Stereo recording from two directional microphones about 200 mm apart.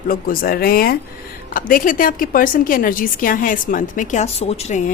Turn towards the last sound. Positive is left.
turn(degrees=30)  # may be behind; listen again after turning